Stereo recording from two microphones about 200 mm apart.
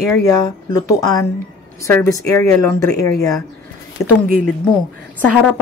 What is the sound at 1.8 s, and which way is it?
Speech, 15° left (ahead or behind).